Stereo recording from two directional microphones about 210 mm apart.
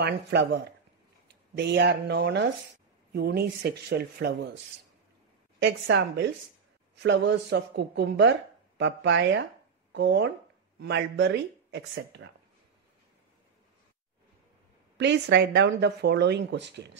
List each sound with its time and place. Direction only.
0.0 s speech: 50° right (ahead or behind)
5.6 s speech: 60° right (ahead or behind)
15.0 s speech: 55° right (ahead or behind)